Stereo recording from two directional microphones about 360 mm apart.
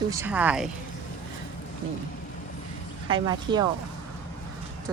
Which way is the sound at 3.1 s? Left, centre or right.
Centre.